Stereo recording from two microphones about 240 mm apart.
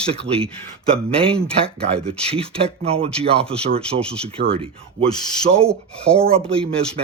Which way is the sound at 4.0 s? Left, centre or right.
Centre.